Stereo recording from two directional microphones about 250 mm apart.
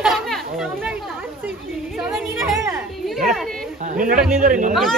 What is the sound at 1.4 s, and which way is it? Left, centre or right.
Children playing, centre.